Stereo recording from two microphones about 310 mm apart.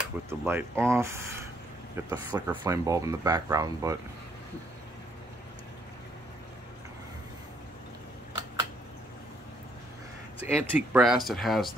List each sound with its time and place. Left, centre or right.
0.3 s speech: centre
10.4 s speech: centre